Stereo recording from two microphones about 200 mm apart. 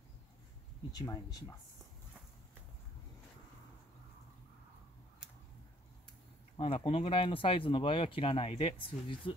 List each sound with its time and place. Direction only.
0.9 s speech: 20° left (ahead or behind)
6.5 s speech: 25° left (ahead or behind)